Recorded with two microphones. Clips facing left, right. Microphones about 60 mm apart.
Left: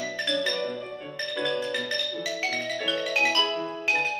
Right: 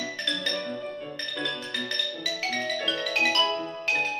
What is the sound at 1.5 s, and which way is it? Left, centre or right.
Music, centre.